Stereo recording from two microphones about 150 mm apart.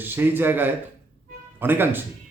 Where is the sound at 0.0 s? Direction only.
15° right (ahead or behind).